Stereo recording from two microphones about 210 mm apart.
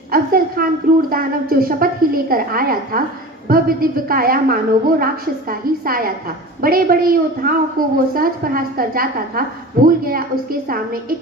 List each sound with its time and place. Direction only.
0.1 s a woman's voice: 45° right (ahead or behind)